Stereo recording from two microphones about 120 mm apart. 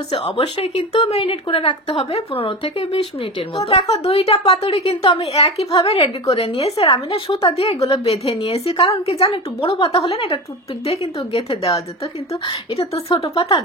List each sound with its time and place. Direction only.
0.6 s a woman's voice: 45° left (ahead or behind)